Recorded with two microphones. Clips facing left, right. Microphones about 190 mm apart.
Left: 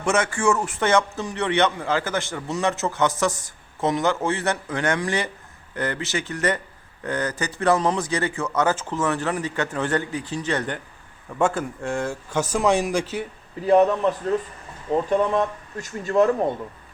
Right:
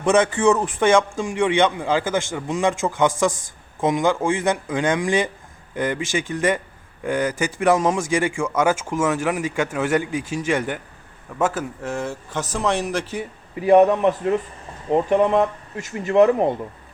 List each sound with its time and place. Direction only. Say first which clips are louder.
0.0 s a man's voice: right 5 dB; 15° right (ahead or behind); by 13.2 s centre (ahead or behind)
13.6 s a man's voice: right 3 dB; 10° right (ahead or behind)